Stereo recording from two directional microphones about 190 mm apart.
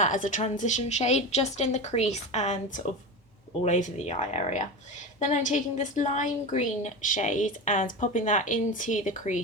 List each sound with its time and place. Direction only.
0.0 s a woman's voice: 40° left (ahead or behind)